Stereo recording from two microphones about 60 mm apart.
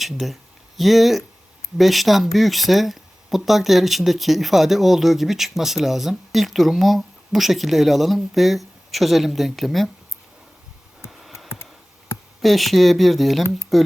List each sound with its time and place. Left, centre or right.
0.0 s speech: centre
11.1 s a sound: centre
11.4 s computer keyboard: left
12.4 s speech: centre